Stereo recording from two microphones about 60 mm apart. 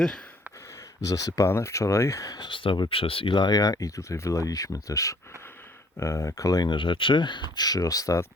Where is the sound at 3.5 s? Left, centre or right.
Left.